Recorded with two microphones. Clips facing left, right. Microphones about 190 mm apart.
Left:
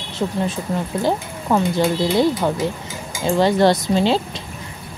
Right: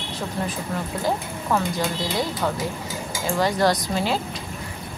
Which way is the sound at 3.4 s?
25° left (ahead or behind).